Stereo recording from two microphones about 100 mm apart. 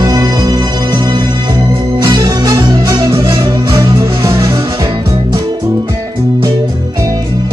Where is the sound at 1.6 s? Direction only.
30° right (ahead or behind).